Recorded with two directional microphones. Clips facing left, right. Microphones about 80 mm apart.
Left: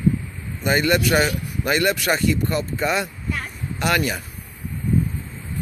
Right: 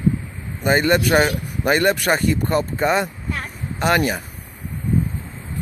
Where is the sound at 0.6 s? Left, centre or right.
Right.